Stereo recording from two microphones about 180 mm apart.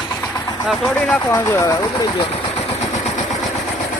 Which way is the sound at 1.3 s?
15° left (ahead or behind).